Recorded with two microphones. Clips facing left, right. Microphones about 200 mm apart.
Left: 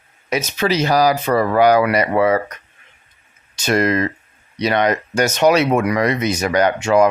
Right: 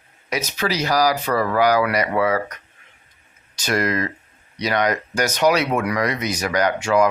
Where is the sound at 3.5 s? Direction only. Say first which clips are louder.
Left 5 dB; 25° left (ahead or behind).